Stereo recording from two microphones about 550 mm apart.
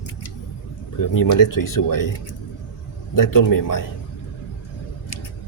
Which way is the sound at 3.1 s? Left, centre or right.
Left.